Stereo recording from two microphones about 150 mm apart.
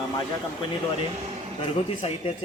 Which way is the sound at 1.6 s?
40° left (ahead or behind).